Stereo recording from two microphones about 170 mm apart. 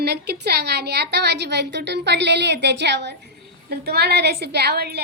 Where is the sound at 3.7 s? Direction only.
70° right (ahead or behind).